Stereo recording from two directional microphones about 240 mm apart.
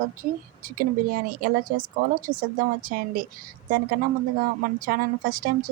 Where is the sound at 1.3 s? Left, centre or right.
Right.